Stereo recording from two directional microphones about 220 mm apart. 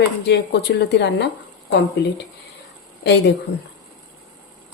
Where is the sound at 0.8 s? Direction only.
50° left (ahead or behind).